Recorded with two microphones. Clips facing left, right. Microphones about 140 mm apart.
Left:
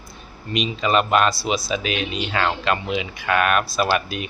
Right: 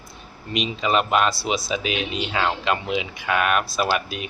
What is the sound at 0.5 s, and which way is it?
Speech, 15° right (ahead or behind).